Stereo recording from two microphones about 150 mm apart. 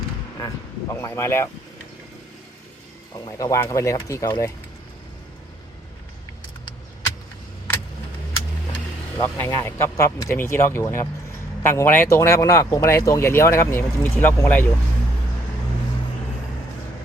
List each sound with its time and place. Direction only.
0.9 s speech: 20° left (ahead or behind)
3.2 s speech: 25° left (ahead or behind)
9.1 s speech: 15° left (ahead or behind)